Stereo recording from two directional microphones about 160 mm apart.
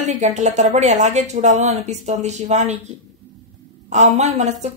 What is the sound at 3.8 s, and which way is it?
Speech, 45° right (ahead or behind).